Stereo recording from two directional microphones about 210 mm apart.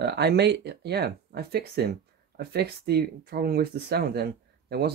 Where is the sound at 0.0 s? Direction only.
50° right (ahead or behind).